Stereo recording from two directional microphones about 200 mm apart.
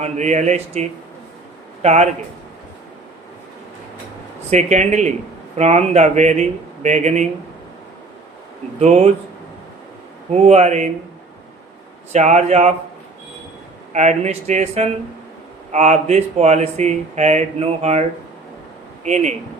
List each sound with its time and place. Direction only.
0.0 s speech: 35° right (ahead or behind)
4.5 s speech: 35° right (ahead or behind)
8.8 s speech: 35° right (ahead or behind)
10.3 s speech: 35° right (ahead or behind)
12.1 s speech: 35° right (ahead or behind)
13.9 s speech: 35° right (ahead or behind)
19.0 s speech: 35° right (ahead or behind)